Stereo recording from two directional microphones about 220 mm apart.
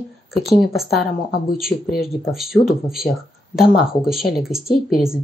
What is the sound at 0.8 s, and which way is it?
Speech, 45° left (ahead or behind).